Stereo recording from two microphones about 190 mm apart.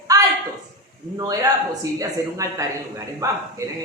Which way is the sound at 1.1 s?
20° right (ahead or behind).